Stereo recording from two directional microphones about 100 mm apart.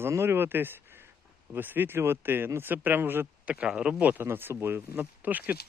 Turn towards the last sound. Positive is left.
turn(degrees=-15)  # may be behind; listen again after turning